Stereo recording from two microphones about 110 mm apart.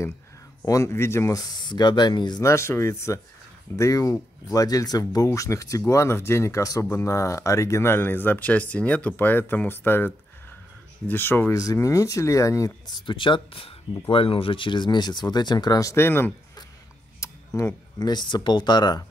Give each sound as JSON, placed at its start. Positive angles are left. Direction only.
{"t": 0.7, "sound": "speech", "side_deg": 25}
{"t": 2.4, "sound": "speech", "side_deg": 25}
{"t": 17.2, "sound": "camera", "side_deg": 25}
{"t": 17.9, "sound": "speech", "side_deg": 40}